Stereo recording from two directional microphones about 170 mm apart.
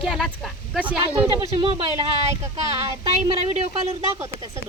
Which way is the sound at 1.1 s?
30° right (ahead or behind).